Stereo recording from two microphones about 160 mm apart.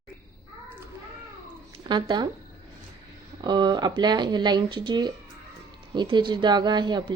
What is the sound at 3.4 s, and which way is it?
Speech, 25° right (ahead or behind).